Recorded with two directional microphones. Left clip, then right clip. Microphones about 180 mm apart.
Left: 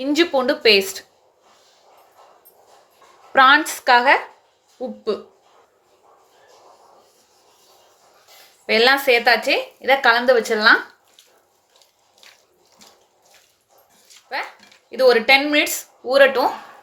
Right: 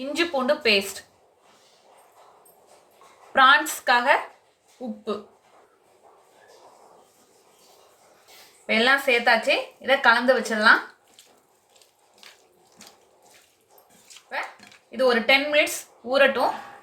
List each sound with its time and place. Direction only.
0.0 s a woman's voice: 45° left (ahead or behind)
3.3 s a woman's voice: 50° left (ahead or behind)
8.6 s a woman's voice: 55° left (ahead or behind)
14.8 s speech: 55° left (ahead or behind)